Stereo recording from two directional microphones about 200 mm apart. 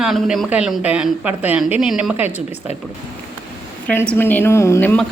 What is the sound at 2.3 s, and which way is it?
Speech, 35° left (ahead or behind).